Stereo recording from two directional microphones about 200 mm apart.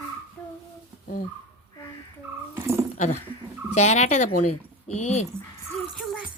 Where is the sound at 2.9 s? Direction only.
35° left (ahead or behind).